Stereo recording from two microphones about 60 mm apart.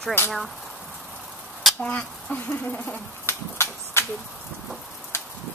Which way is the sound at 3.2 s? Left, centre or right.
Left.